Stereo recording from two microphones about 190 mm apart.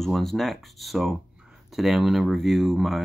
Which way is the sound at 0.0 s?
Centre (ahead or behind).